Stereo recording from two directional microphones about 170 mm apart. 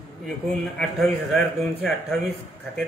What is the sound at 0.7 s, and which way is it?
A man's voice, centre (ahead or behind).